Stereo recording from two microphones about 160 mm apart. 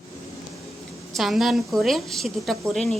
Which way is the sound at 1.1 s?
Centre (ahead or behind).